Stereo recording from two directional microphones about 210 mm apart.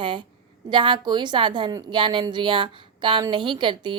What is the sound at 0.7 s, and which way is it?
A woman's voice, 20° right (ahead or behind).